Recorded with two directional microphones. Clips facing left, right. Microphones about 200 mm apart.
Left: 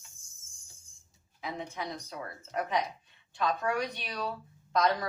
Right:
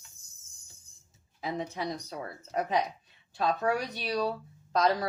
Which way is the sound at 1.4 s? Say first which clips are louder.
Right 4 dB; 35° right (ahead or behind).